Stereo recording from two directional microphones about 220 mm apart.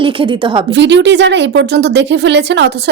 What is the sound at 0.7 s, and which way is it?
A woman's voice, 55° right (ahead or behind).